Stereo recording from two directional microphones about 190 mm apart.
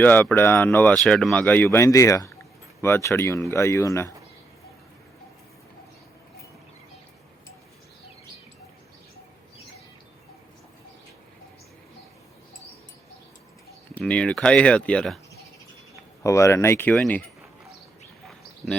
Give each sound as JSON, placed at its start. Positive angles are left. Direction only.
{"t": 0.0, "sound": "speech", "side_deg": 10}
{"t": 13.9, "sound": "speech", "side_deg": 5}
{"t": 16.2, "sound": "speech", "side_deg": 15}
{"t": 18.3, "sound": "a sound", "side_deg": 0}